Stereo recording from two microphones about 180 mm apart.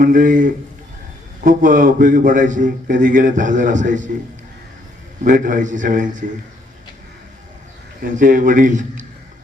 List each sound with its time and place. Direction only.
0.0 s a man's voice: 50° right (ahead or behind)
5.2 s a man's voice: 45° right (ahead or behind)
8.0 s a man's voice: 45° right (ahead or behind)